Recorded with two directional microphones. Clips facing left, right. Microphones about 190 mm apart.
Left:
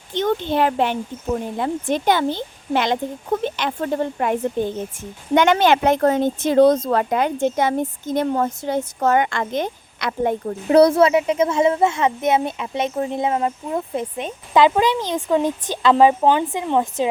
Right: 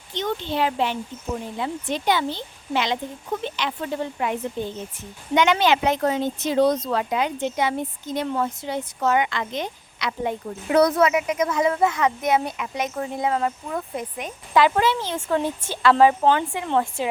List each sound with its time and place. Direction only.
0.1 s a woman's voice: 55° left (ahead or behind)
10.7 s speech: 30° left (ahead or behind)